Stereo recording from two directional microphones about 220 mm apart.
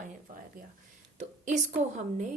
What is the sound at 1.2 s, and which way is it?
Speech, 35° right (ahead or behind).